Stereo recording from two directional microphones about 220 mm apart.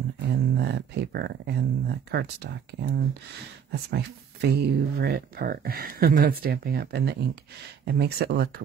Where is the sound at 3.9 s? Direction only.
45° right (ahead or behind).